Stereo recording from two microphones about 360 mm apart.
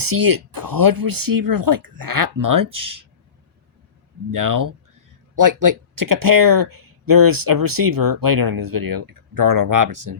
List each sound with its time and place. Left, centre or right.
0.0 s speech: right
4.3 s speech: right